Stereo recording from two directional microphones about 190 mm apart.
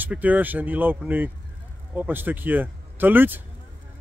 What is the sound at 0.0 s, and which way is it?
Speech, 10° right (ahead or behind).